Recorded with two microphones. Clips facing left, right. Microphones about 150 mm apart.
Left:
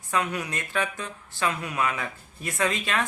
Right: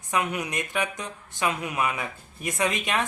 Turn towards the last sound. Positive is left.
turn(degrees=-15)  # may be behind; listen again after turning